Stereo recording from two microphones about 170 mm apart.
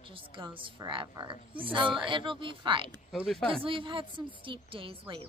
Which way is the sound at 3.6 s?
30° right (ahead or behind).